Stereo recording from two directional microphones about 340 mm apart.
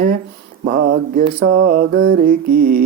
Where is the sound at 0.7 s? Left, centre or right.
Right.